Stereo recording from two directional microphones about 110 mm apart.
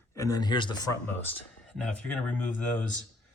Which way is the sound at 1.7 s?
5° left (ahead or behind).